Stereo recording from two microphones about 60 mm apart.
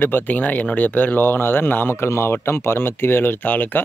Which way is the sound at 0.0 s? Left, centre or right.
Left.